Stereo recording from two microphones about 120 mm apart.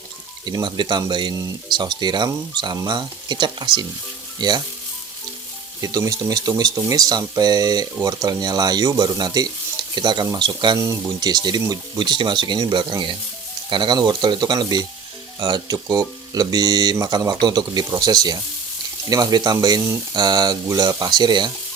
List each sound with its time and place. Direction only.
0.4 s speech: 40° right (ahead or behind)
5.8 s speech: 30° right (ahead or behind)
10.8 s speech: 25° right (ahead or behind)